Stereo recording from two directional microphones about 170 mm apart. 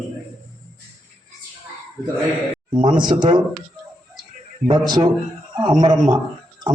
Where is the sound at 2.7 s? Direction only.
25° right (ahead or behind).